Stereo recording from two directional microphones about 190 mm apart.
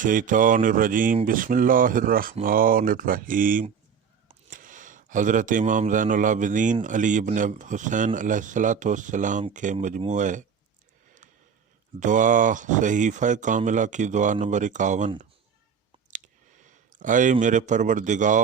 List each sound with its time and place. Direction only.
0.0 s speech: 45° right (ahead or behind)
11.9 s speech: 40° right (ahead or behind)
16.9 s a man's voice: 40° right (ahead or behind)